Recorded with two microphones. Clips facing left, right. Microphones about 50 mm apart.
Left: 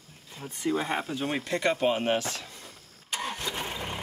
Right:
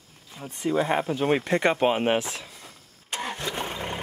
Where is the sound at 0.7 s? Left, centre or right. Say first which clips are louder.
Right 5 dB; right.